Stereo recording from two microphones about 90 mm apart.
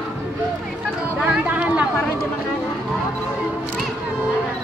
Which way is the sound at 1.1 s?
15° right (ahead or behind).